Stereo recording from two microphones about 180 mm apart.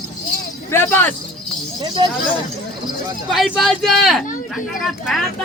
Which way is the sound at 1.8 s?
25° right (ahead or behind).